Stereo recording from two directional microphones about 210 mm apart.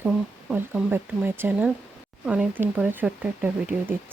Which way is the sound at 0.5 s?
10° right (ahead or behind).